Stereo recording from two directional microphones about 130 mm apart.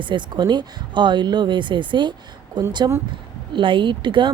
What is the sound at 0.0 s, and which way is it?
A woman's voice, 40° right (ahead or behind).